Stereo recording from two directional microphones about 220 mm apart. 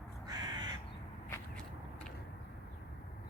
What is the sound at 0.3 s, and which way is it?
Crow, 20° right (ahead or behind).